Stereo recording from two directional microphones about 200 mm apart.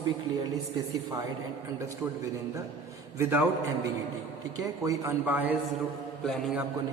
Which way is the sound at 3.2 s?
10° right (ahead or behind).